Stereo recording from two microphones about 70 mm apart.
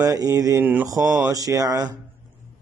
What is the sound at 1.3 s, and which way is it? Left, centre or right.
Mantra, right.